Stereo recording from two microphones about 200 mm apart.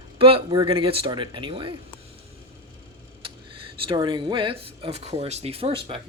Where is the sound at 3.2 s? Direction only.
25° right (ahead or behind).